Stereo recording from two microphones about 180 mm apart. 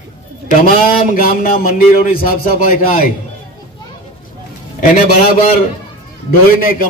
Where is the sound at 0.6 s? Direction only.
55° left (ahead or behind).